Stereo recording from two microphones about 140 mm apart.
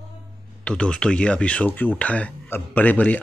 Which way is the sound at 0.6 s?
5° left (ahead or behind).